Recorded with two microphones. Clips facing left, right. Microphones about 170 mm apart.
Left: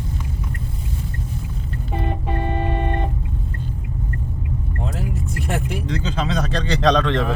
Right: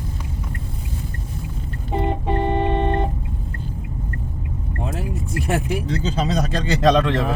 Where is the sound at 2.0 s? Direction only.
20° right (ahead or behind).